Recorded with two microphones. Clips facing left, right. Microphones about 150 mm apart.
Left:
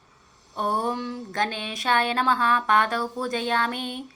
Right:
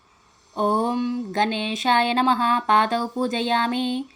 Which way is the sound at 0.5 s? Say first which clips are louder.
Right 5 dB; 25° right (ahead or behind).